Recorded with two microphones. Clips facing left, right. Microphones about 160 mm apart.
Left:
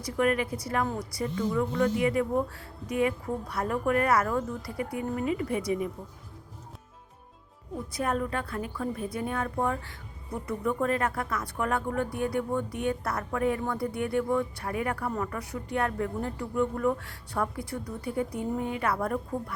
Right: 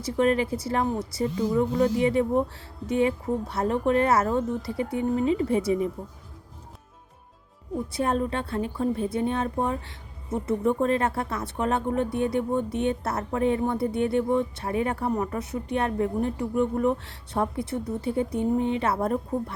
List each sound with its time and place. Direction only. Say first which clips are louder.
0.0 s a woman's voice: right 4 dB; 30° right (ahead or behind)
7.9 s a woman's voice: right 3 dB; 30° right (ahead or behind)